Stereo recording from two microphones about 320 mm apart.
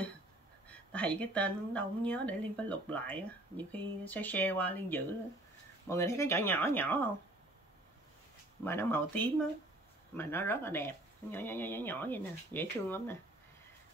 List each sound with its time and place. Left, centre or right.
0.7 s speech: centre
8.6 s speech: centre